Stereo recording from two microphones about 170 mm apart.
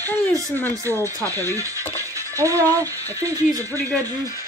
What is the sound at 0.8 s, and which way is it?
Speech, 20° right (ahead or behind).